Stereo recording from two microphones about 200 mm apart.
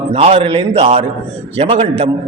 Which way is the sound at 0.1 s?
30° right (ahead or behind).